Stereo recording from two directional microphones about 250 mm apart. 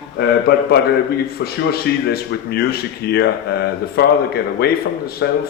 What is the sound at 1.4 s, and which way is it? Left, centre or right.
Speech, left.